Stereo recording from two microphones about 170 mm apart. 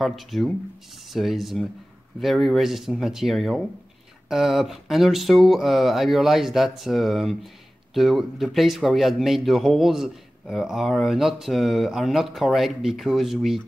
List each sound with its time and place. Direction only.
0.0 s speech: centre (ahead or behind)